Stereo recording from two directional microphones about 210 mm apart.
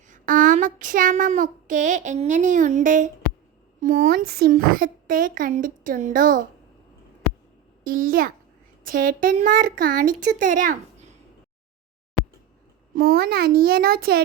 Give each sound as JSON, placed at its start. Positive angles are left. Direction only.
{"t": 0.1, "sound": "child singing", "side_deg": -40}
{"t": 3.8, "sound": "speech", "side_deg": -40}
{"t": 7.9, "sound": "speech", "side_deg": -40}
{"t": 12.9, "sound": "a child's voice", "side_deg": -45}